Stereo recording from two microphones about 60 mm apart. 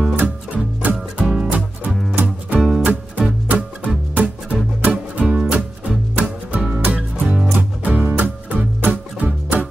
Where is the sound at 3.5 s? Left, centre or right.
Right.